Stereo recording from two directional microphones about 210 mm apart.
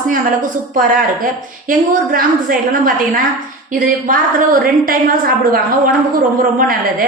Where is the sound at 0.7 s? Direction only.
40° right (ahead or behind).